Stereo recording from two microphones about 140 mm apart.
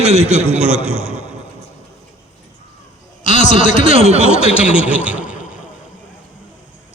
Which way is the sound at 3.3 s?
60° left (ahead or behind).